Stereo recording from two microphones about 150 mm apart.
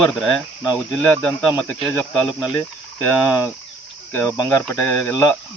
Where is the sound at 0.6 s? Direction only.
20° left (ahead or behind).